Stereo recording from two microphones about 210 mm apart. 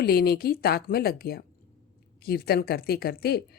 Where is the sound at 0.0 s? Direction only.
45° left (ahead or behind).